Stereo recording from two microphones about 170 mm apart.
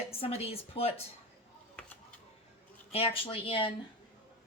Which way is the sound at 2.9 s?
35° left (ahead or behind).